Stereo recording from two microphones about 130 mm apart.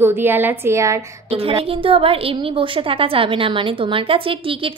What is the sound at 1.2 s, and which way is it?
A woman's voice, 45° right (ahead or behind).